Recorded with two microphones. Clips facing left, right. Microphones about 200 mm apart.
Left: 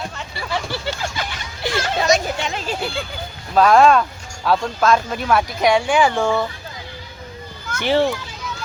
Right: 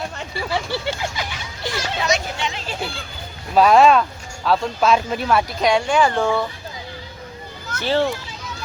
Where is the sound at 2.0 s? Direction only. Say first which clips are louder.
Left 4 dB; 45° left (ahead or behind).